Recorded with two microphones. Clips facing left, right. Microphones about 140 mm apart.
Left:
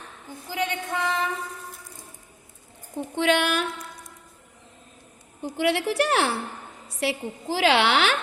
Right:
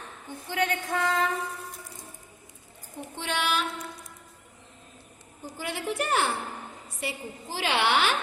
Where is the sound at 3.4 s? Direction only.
55° left (ahead or behind).